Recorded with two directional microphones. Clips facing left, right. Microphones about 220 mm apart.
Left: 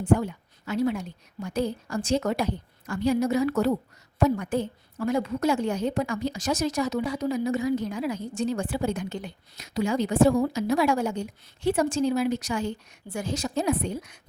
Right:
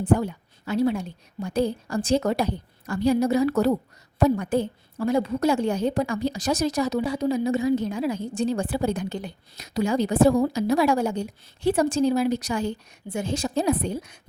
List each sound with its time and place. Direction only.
0.0 s a woman's voice: 35° right (ahead or behind)
13.1 s a woman's voice: 25° right (ahead or behind)